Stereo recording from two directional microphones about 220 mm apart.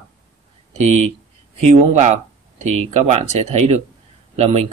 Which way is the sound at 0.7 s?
30° right (ahead or behind).